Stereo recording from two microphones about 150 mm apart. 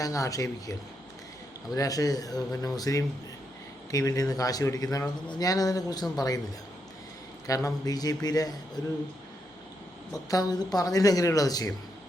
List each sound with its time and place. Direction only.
0.0 s a man's voice: 20° left (ahead or behind)
7.4 s a man's voice: 25° left (ahead or behind)
10.1 s a man's voice: 25° left (ahead or behind)